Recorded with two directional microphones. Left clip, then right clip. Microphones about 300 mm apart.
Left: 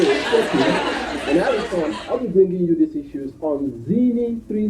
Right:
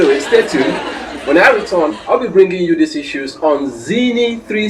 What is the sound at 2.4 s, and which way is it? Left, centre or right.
Speech, centre.